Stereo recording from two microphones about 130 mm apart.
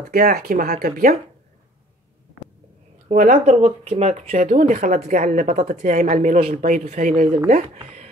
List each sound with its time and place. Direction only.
0.1 s speech: 90° right
3.1 s speech: 70° right (ahead or behind)